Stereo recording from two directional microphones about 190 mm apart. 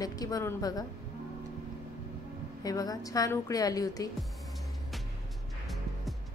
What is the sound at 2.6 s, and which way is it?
A woman's voice, 20° left (ahead or behind).